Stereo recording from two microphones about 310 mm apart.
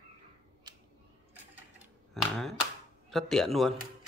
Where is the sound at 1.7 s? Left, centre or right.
Centre.